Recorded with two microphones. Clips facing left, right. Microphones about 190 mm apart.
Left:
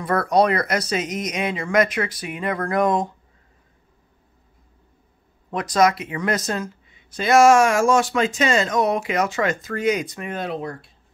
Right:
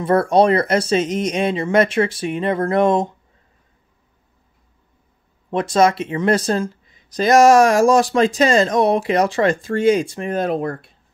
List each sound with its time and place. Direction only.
0.0 s speech: 30° right (ahead or behind)
5.5 s speech: 25° right (ahead or behind)
10.4 s speech: 50° right (ahead or behind)